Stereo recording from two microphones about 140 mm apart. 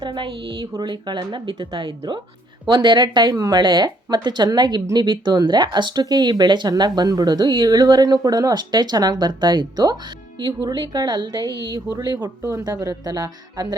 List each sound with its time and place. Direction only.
0.0 s a woman's voice: 35° right (ahead or behind)